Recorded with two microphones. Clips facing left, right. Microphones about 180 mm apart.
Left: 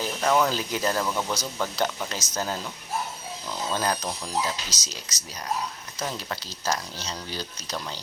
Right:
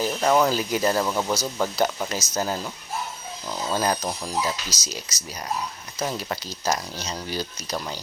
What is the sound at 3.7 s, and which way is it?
Speech, 10° right (ahead or behind).